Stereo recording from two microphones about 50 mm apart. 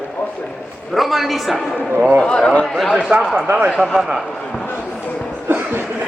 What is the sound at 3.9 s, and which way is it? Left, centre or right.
Speech, centre.